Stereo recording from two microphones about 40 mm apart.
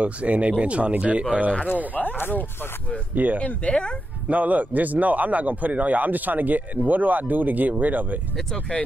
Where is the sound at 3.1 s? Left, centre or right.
Right.